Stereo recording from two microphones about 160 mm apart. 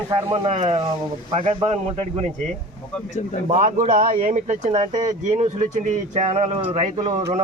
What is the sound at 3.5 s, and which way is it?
Speech, 50° right (ahead or behind).